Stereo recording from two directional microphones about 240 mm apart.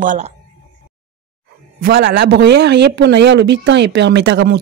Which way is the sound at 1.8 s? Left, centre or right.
Right.